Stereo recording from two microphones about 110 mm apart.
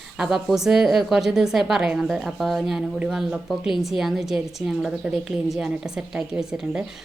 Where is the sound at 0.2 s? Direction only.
5° right (ahead or behind).